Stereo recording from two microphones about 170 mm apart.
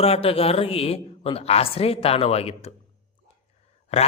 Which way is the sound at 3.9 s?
40° left (ahead or behind).